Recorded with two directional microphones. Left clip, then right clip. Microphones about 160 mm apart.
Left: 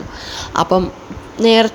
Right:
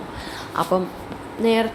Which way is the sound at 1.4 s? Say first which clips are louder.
Left 8 dB; 55° left (ahead or behind).